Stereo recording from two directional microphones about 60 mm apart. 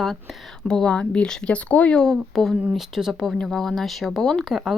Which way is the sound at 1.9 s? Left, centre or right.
Centre.